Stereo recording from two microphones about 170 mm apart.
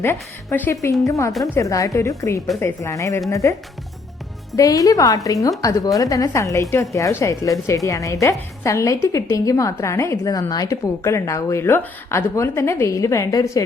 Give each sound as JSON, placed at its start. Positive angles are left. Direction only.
{"t": 0.0, "sound": "a woman's voice", "side_deg": 10}
{"t": 4.5, "sound": "a woman's voice", "side_deg": 20}